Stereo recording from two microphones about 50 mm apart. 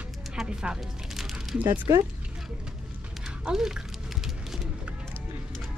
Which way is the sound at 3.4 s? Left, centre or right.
Centre.